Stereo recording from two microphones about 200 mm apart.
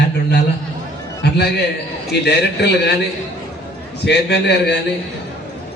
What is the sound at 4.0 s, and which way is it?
Speech, 55° left (ahead or behind).